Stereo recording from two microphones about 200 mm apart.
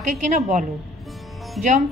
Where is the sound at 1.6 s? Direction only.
Centre (ahead or behind).